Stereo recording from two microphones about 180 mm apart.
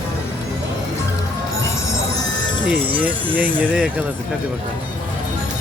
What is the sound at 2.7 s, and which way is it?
Speech, 10° right (ahead or behind).